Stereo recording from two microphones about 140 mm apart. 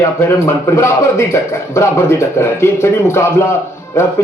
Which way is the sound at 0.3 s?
20° left (ahead or behind).